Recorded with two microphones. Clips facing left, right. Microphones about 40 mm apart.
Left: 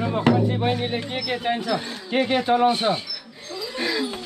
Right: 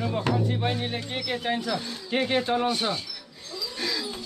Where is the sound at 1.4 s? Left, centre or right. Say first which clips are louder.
Left 5 dB; left.